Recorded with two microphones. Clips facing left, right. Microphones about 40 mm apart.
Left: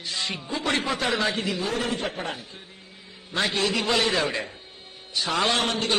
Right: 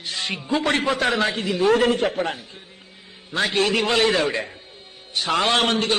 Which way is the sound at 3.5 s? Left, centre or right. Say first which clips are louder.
Right 5 dB; right.